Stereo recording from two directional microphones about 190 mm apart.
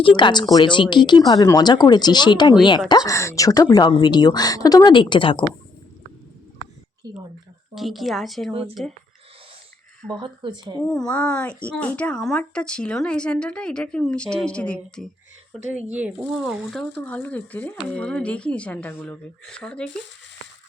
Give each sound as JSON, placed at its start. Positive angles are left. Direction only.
{"t": 0.0, "sound": "speech", "side_deg": 25}
{"t": 7.0, "sound": "speech", "side_deg": -20}
{"t": 7.8, "sound": "speech", "side_deg": 0}
{"t": 10.2, "sound": "speech", "side_deg": -25}
{"t": 10.8, "sound": "speech", "side_deg": 5}
{"t": 15.9, "sound": "speech", "side_deg": -10}